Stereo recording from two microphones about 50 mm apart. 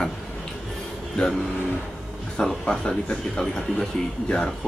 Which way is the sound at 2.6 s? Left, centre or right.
Centre.